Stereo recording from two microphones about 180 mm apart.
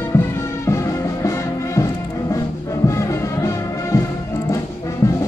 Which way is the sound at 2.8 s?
15° left (ahead or behind).